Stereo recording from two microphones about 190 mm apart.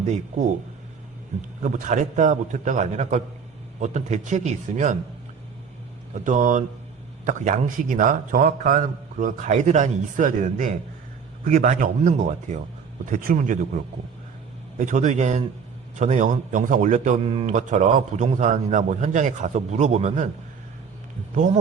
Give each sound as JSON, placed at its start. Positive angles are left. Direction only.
{"t": 0.0, "sound": "a man's voice", "side_deg": -35}
{"t": 6.1, "sound": "a man's voice", "side_deg": -40}
{"t": 14.8, "sound": "a man's voice", "side_deg": -40}
{"t": 21.3, "sound": "a man's voice", "side_deg": -40}